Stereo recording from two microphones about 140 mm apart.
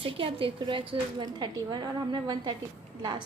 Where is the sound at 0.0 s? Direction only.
40° right (ahead or behind).